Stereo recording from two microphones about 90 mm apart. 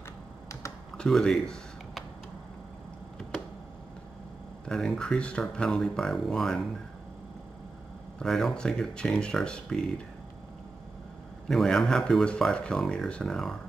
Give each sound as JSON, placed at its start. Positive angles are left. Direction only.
{"t": 0.5, "sound": "computer keyboard", "side_deg": 35}
{"t": 0.9, "sound": "a sound", "side_deg": 10}
{"t": 4.6, "sound": "speech", "side_deg": 10}
{"t": 8.2, "sound": "speech", "side_deg": 5}
{"t": 11.4, "sound": "speech", "side_deg": 5}